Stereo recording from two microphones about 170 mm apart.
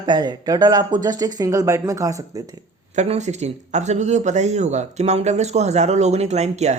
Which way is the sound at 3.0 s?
40° right (ahead or behind).